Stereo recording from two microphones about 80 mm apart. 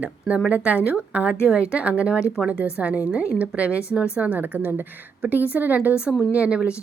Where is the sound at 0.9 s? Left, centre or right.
Centre.